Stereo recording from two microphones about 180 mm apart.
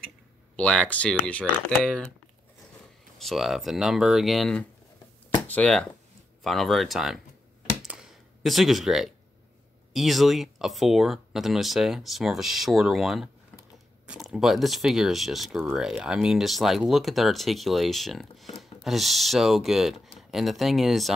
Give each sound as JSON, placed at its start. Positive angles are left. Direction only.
{"t": 0.6, "sound": "speech", "side_deg": 5}
{"t": 3.2, "sound": "speech", "side_deg": 0}
{"t": 7.8, "sound": "a sound", "side_deg": -5}
{"t": 9.9, "sound": "speech", "side_deg": 0}